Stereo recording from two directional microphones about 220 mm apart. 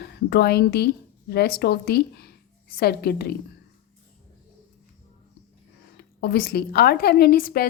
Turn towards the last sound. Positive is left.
turn(degrees=40)  # may be behind; listen again after turning